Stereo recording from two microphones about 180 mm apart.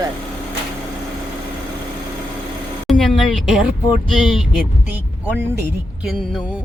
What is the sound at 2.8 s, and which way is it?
A woman's voice, centre (ahead or behind).